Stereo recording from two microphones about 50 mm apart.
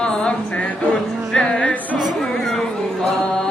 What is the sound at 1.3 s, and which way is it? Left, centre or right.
Music, centre.